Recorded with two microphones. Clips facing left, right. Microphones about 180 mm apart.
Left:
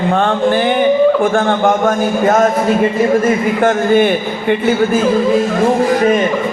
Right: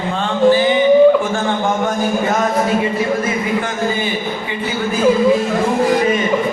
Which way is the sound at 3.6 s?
60° left (ahead or behind).